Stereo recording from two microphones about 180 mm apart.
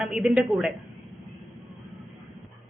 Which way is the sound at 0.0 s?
5° right (ahead or behind).